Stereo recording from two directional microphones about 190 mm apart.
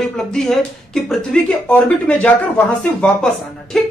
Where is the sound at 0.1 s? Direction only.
5° left (ahead or behind).